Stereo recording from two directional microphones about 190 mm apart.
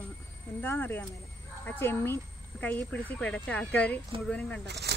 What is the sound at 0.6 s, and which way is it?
Speech, 10° left (ahead or behind).